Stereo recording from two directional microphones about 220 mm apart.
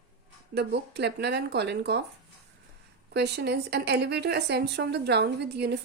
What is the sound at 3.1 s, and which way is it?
Speech, 50° right (ahead or behind).